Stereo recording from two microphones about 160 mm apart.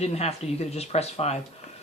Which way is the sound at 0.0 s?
40° left (ahead or behind).